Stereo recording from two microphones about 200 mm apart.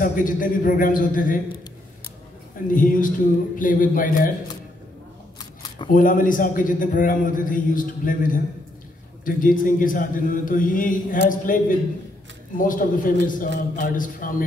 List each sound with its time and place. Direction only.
0.0 s a man's voice: 40° left (ahead or behind)
2.7 s a man's voice: 45° left (ahead or behind)
5.4 s camera: 20° left (ahead or behind)
5.9 s a man's voice: 40° left (ahead or behind)